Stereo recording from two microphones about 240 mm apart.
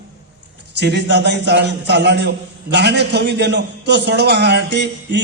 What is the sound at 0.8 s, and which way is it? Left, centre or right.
A man's voice, right.